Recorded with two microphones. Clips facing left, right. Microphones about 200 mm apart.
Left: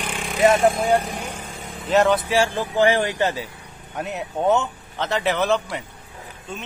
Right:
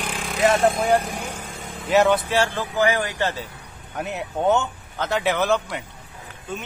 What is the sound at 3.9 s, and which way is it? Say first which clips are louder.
A man's voice: even; centre (ahead or behind).